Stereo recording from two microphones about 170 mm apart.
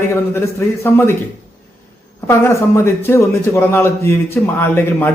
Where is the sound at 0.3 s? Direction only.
15° left (ahead or behind).